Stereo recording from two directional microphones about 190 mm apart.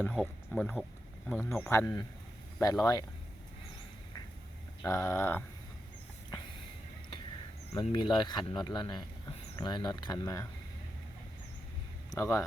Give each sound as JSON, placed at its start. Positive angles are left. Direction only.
{"t": 0.0, "sound": "speech", "side_deg": 0}
{"t": 4.8, "sound": "speech", "side_deg": 15}
{"t": 7.7, "sound": "speech", "side_deg": 20}
{"t": 12.1, "sound": "speech", "side_deg": 15}